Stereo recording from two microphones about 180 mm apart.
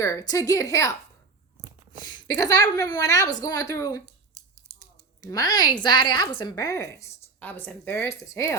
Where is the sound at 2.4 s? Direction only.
20° left (ahead or behind).